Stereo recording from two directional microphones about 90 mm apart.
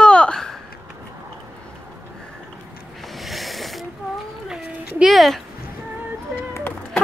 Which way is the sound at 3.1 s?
Centre (ahead or behind).